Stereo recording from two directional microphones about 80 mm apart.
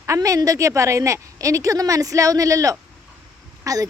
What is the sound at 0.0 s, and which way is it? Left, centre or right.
A woman's voice, right.